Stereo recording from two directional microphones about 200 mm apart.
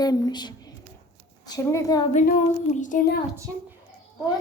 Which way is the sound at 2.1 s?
40° left (ahead or behind).